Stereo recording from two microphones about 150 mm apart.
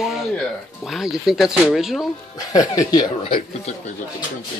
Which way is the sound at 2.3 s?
25° left (ahead or behind).